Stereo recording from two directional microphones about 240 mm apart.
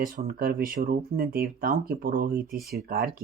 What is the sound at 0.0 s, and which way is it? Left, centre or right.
Speech, right.